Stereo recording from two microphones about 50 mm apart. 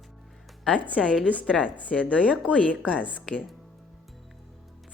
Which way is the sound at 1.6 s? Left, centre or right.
Left.